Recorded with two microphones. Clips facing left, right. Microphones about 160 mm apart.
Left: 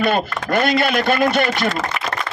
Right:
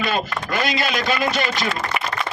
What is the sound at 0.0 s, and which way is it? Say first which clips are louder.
A man's voice: left 4 dB; 55° left (ahead or behind).